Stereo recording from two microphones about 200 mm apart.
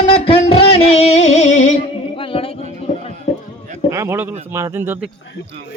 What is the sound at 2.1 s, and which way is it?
Music, 25° left (ahead or behind).